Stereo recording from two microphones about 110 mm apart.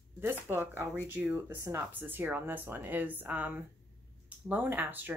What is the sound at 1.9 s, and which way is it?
Speech, 15° right (ahead or behind).